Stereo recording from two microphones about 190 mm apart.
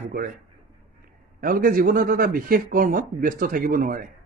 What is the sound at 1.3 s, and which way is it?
Speech, 50° right (ahead or behind).